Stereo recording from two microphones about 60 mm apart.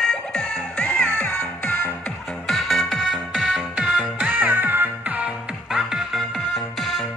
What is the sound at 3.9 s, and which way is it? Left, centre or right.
Music, right.